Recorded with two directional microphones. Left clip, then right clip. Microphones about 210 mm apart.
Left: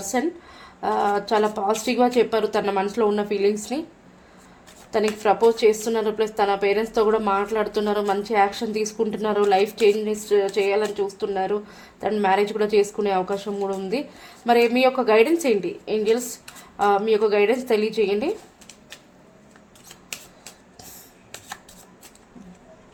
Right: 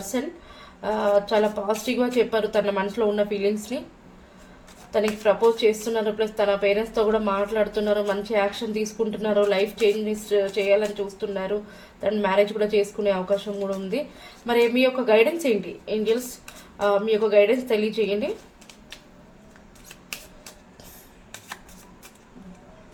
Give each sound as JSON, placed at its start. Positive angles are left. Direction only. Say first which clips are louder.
{"t": 0.8, "sound": "a woman's voice", "louder": "even", "side_deg": 40}
{"t": 4.9, "sound": "a woman's voice", "louder": "left 1 dB", "side_deg": 40}